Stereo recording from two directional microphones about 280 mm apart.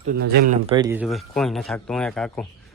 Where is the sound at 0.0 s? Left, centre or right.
Right.